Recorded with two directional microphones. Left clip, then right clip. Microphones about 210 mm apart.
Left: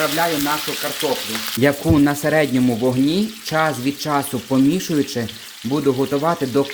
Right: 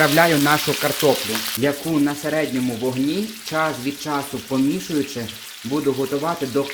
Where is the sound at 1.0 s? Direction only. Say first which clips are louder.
Right 4 dB; 45° right (ahead or behind).